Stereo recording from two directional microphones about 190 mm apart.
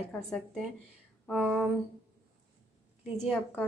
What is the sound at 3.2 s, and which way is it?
Speech, 5° left (ahead or behind).